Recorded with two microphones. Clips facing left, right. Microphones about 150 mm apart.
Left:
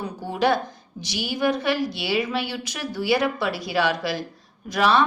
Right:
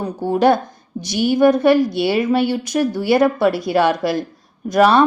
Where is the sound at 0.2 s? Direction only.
50° right (ahead or behind).